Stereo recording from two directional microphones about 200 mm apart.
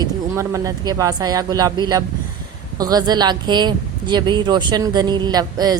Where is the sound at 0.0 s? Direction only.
15° right (ahead or behind).